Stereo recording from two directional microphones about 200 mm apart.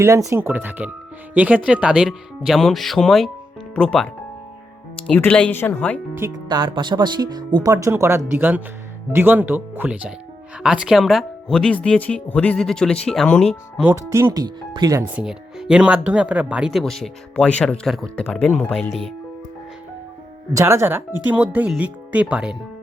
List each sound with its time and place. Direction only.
0.0 s speech: 15° right (ahead or behind); by 6.0 s 5° left (ahead or behind)
6.1 s speech: 15° right (ahead or behind); by 13.5 s 5° left (ahead or behind)
13.7 s speech: 10° right (ahead or behind)
15.1 s speech: 5° right (ahead or behind)
20.5 s speech: 15° right (ahead or behind)